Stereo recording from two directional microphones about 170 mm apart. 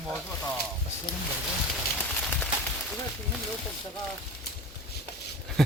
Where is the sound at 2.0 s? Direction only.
10° left (ahead or behind).